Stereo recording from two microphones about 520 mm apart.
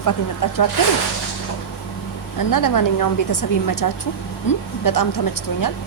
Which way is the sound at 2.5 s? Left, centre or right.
Left.